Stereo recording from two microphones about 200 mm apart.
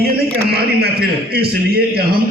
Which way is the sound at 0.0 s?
50° right (ahead or behind).